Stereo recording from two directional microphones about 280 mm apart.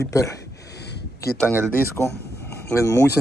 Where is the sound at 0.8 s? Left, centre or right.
Left.